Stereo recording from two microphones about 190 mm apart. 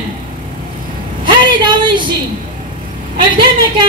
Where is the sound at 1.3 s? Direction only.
25° right (ahead or behind).